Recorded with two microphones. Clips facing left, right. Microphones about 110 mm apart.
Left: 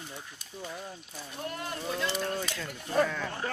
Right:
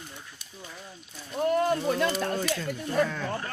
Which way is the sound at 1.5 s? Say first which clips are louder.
Right 9 dB; 50° right (ahead or behind).